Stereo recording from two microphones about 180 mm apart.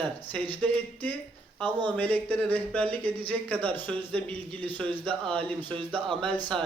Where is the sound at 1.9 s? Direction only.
10° left (ahead or behind).